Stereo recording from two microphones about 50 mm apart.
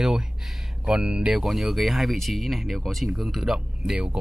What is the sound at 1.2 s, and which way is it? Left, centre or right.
Speech, centre.